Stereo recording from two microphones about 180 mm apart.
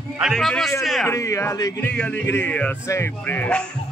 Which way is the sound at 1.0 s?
15° left (ahead or behind).